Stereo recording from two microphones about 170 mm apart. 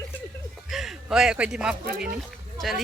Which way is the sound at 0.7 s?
Centre (ahead or behind).